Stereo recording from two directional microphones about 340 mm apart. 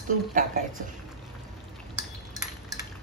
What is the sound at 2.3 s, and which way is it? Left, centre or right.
Cutlery, centre.